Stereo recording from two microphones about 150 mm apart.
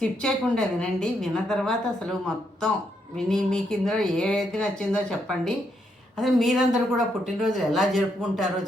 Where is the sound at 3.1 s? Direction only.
5° left (ahead or behind).